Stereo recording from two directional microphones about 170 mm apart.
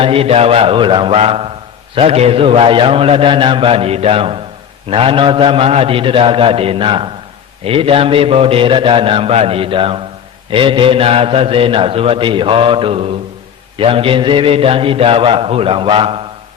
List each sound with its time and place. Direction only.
0.0 s a man's voice: 35° right (ahead or behind)